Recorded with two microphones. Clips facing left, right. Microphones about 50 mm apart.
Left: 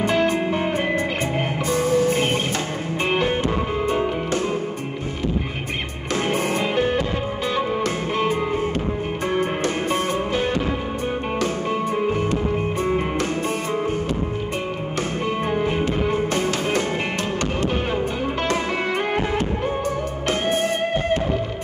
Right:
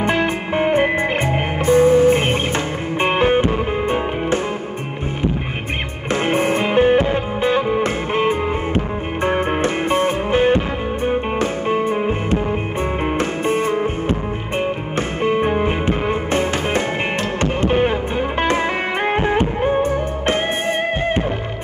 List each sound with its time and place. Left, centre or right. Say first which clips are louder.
0.0 s music: right 1 dB; right
6.1 s music: right 4 dB; right
11.7 s music: right 4 dB; right
15.2 s music: right 6 dB; right
18.4 s music: right 4 dB; right